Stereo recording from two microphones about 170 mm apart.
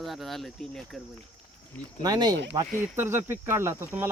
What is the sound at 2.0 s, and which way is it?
Speech, 25° right (ahead or behind).